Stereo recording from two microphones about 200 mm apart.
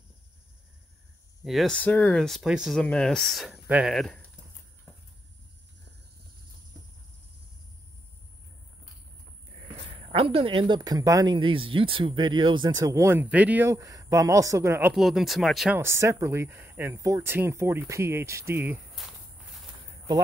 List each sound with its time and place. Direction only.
1.4 s speech: centre (ahead or behind)
10.1 s speech: 30° right (ahead or behind); by 15.8 s centre (ahead or behind)
15.8 s speech: 15° right (ahead or behind)
19.0 s speech: centre (ahead or behind)